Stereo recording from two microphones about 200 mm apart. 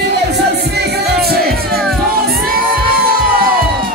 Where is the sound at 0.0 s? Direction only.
55° right (ahead or behind).